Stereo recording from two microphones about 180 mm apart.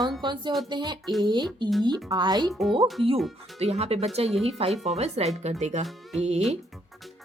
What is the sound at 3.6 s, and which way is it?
Speech, 35° right (ahead or behind).